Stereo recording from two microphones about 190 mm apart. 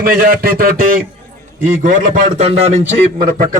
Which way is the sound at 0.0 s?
50° right (ahead or behind).